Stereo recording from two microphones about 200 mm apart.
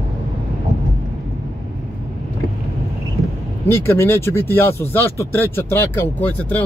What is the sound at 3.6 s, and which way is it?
Speech, 10° left (ahead or behind).